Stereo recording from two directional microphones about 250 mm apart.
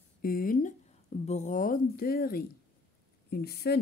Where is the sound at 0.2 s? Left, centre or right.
Left.